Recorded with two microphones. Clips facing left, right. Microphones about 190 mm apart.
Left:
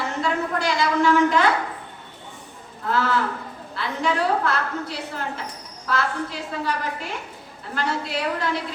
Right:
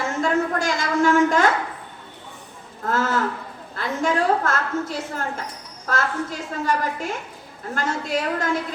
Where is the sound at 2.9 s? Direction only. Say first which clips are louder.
Even; 45° right (ahead or behind).